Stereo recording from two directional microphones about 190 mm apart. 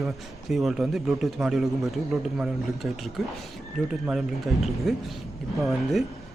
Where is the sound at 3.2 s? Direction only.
Centre (ahead or behind).